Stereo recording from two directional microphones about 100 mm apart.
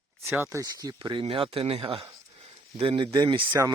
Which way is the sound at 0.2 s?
25° right (ahead or behind).